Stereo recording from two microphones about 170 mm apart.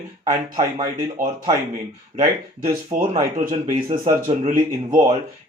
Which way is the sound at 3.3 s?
40° right (ahead or behind).